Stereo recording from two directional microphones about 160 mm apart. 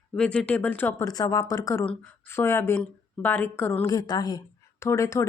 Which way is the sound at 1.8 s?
5° left (ahead or behind).